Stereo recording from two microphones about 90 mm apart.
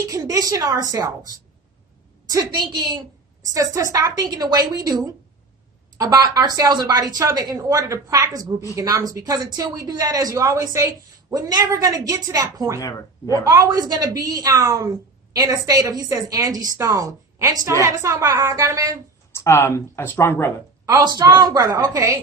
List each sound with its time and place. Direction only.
0.1 s a woman's voice: 40° right (ahead or behind)
2.3 s a woman's voice: 50° right (ahead or behind)
3.4 s a woman's voice: 40° right (ahead or behind)
12.8 s speech: 35° left (ahead or behind)
13.4 s a woman's voice: 45° right (ahead or behind); by 18.5 s 25° right (ahead or behind)
18.5 s a woman's voice: 40° right (ahead or behind)
19.3 s speech: 30° left (ahead or behind)
20.8 s a woman's voice: 45° right (ahead or behind)
21.9 s a woman's voice: 30° right (ahead or behind)